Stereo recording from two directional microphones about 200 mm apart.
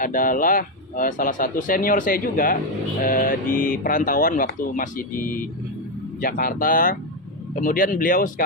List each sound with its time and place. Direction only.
0.0 s speech: 45° left (ahead or behind)